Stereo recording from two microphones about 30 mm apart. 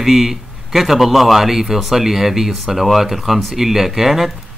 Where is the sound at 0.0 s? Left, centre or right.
Centre.